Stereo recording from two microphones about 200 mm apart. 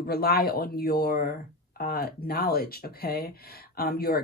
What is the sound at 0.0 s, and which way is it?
Speech, 50° left (ahead or behind).